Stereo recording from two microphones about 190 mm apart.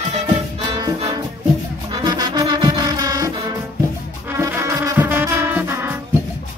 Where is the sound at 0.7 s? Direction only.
25° right (ahead or behind).